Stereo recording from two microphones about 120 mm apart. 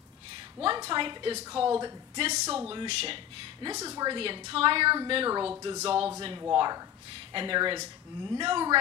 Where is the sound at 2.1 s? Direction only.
65° right (ahead or behind).